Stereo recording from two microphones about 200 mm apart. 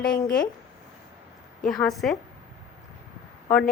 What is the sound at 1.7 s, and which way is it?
Speech, centre (ahead or behind).